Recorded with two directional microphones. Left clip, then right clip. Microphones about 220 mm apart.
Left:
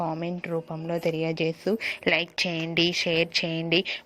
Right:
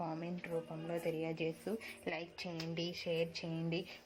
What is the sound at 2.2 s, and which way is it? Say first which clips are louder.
Speech: left 17 dB; 90° left.